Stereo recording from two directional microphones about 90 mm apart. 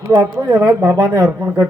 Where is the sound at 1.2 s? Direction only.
15° right (ahead or behind).